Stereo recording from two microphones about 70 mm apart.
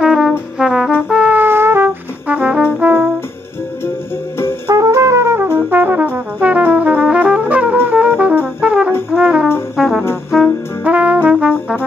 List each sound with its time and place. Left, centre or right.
0.0 s brass instrument: centre
1.0 s music: centre
1.3 s music: right
2.2 s brass instrument: centre
4.6 s brass instrument: right
5.7 s brass instrument: right; by 10.0 s centre
10.8 s brass instrument: right